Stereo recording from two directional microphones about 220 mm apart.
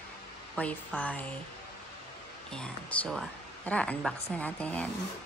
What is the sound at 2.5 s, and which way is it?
Speech, 5° left (ahead or behind).